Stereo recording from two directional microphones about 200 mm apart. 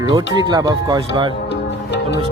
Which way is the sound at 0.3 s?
20° right (ahead or behind).